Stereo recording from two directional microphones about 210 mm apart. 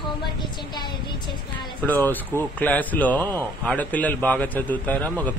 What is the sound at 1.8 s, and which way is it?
A man's voice, 10° left (ahead or behind).